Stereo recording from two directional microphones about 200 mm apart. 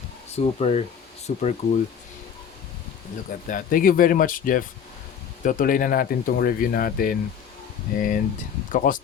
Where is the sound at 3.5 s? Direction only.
45° left (ahead or behind).